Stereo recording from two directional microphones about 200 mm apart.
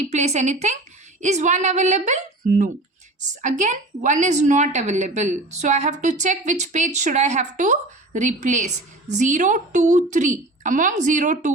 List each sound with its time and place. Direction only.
0.0 s a woman's voice: 35° right (ahead or behind)